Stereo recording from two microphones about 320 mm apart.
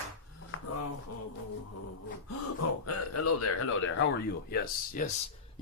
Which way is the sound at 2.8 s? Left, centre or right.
Left.